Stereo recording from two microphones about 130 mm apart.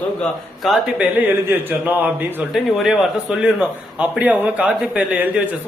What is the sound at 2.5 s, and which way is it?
A man's voice, centre (ahead or behind).